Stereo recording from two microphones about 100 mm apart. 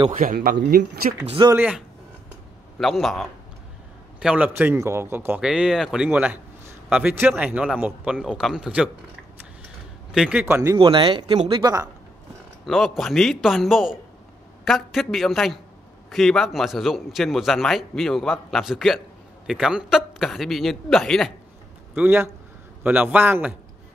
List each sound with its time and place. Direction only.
1.5 s speech: 20° right (ahead or behind)
2.8 s a man's voice: centre (ahead or behind)
4.2 s a man's voice: 10° right (ahead or behind)
4.7 s speech: 30° right (ahead or behind)
5.4 s a man's voice: 5° right (ahead or behind)
10.1 s a man's voice: 10° right (ahead or behind)
10.4 s speech: 30° right (ahead or behind)
10.8 s speech: 50° right (ahead or behind)
11.3 s speech: 60° right (ahead or behind)
12.6 s a man's voice: centre (ahead or behind)
21.9 s a man's voice: 20° right (ahead or behind)